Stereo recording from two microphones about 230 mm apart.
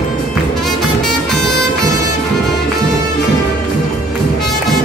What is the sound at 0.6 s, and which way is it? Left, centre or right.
Music, centre.